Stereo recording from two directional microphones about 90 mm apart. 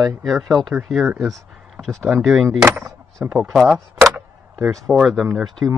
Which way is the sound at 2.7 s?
15° right (ahead or behind).